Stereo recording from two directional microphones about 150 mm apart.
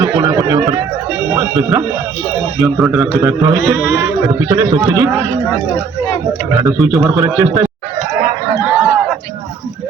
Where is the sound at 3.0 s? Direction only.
20° right (ahead or behind).